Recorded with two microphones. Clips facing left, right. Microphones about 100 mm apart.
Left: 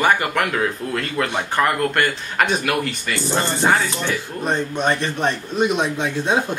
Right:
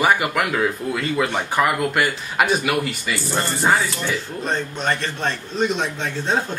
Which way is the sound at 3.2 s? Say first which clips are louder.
Left 3 dB; 20° left (ahead or behind).